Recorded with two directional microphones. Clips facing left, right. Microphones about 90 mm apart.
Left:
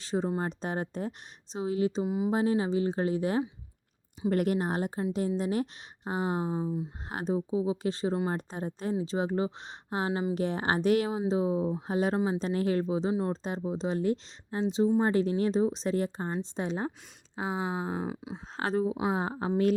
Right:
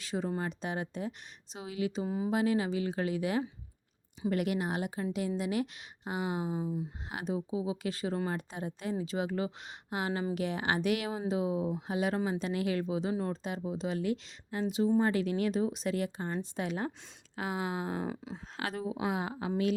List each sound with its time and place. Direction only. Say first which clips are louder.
0.0 s a woman's voice: left 4 dB; 30° left (ahead or behind)
2.0 s a sound: left 4 dB; 15° left (ahead or behind)
2.3 s a woman's voice: left 2 dB; 30° left (ahead or behind)
10.1 s speech: left 3 dB; 20° left (ahead or behind)
10.3 s a woman's voice: left 3 dB; 35° left (ahead or behind)
18.0 s a sound: left 2 dB; 15° left (ahead or behind)
18.5 s a woman's voice: left 7 dB; 30° left (ahead or behind)